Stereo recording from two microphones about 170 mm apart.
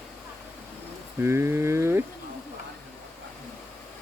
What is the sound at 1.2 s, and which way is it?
Speech, 15° right (ahead or behind).